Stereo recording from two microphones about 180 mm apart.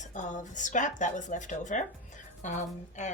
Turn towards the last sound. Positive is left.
turn(degrees=40)  # may be behind; listen again after turning